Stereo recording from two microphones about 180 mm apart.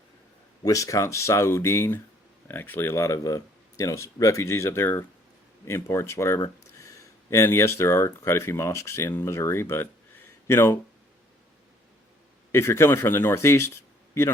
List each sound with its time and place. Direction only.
0.6 s speech: 20° left (ahead or behind)
12.5 s speech: 15° left (ahead or behind)